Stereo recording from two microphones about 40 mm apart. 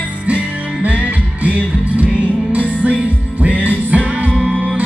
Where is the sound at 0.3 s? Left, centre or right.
Right.